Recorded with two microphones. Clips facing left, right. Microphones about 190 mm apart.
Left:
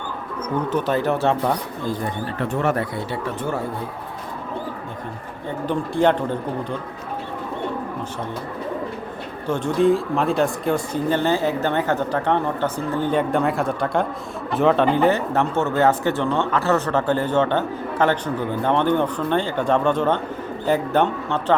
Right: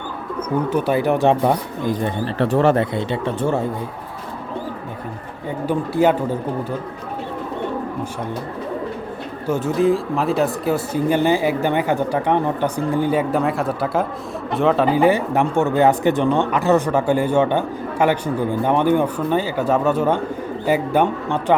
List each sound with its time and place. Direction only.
0.5 s speech: 10° right (ahead or behind); by 3.6 s 25° right (ahead or behind)
5.6 s speech: 5° right (ahead or behind)
9.5 s speech: 5° right (ahead or behind)